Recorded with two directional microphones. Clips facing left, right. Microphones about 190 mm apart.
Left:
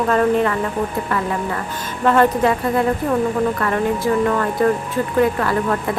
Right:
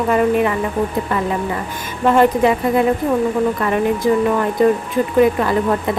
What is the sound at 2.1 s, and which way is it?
Speech, 15° right (ahead or behind).